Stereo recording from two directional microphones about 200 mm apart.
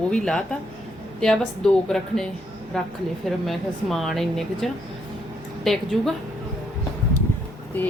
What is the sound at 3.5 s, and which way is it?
Speech, centre (ahead or behind).